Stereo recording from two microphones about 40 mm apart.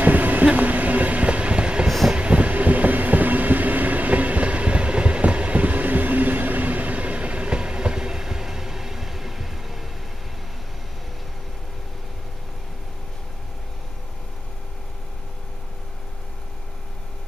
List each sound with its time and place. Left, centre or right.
0.0 s train: right; by 9.8 s centre